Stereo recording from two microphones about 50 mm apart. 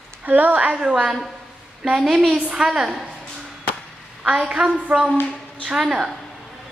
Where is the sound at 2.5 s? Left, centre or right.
Centre.